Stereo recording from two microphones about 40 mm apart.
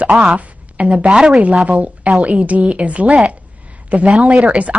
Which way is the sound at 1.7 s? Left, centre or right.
Right.